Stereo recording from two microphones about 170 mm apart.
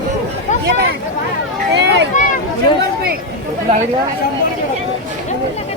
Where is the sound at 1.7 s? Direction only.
85° right.